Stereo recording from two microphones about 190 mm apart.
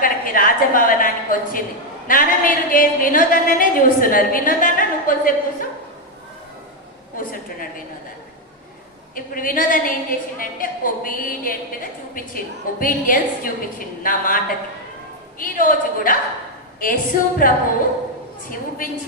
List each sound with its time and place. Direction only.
0.0 s a woman's voice: 45° left (ahead or behind)
7.2 s a sound: 45° left (ahead or behind)
9.1 s a woman's voice: 45° left (ahead or behind)